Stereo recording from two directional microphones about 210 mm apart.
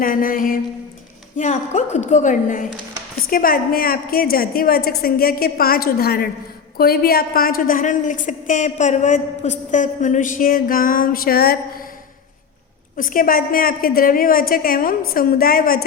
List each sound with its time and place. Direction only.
0.0 s a woman's voice: 40° left (ahead or behind)
13.0 s a woman's voice: 40° left (ahead or behind)